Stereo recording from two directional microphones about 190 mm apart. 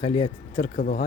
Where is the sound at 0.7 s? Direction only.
45° left (ahead or behind).